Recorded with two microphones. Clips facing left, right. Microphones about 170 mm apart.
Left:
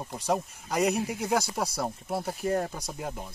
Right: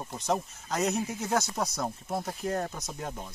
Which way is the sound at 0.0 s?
10° left (ahead or behind).